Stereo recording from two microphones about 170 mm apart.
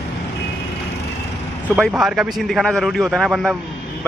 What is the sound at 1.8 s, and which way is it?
A man's voice, centre (ahead or behind).